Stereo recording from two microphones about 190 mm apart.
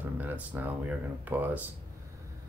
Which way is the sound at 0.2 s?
10° right (ahead or behind).